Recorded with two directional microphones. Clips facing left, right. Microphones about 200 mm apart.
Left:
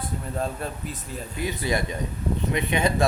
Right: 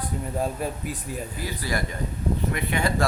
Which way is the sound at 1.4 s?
20° left (ahead or behind).